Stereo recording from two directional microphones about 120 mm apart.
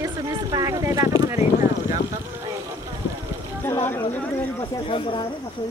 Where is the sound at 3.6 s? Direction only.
20° left (ahead or behind).